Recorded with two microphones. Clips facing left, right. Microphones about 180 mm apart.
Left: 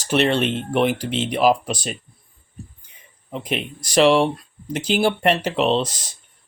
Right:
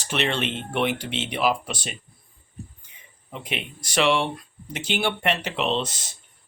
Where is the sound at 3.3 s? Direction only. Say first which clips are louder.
Left 6 dB; 40° left (ahead or behind).